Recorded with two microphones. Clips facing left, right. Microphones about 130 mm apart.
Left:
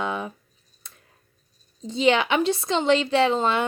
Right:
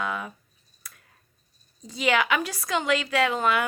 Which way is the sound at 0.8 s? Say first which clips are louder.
Right 1 dB; 25° left (ahead or behind).